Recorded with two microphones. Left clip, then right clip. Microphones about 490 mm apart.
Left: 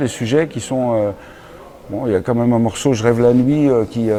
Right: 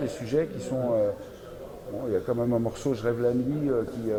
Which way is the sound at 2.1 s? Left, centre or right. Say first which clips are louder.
Left 9 dB; left.